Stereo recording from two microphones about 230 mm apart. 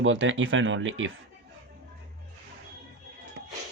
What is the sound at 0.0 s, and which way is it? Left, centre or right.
Speech, right.